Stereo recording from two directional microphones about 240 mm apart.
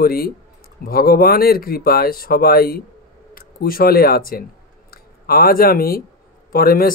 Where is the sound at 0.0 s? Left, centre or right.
Left.